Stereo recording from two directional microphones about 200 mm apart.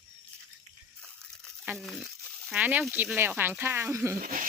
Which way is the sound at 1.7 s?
10° right (ahead or behind).